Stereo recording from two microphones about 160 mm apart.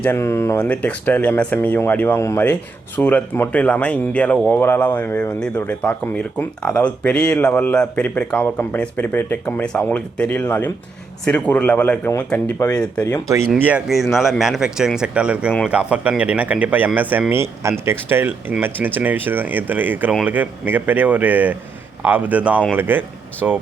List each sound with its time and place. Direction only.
0.0 s speech: 15° left (ahead or behind)
13.6 s speech: 10° right (ahead or behind)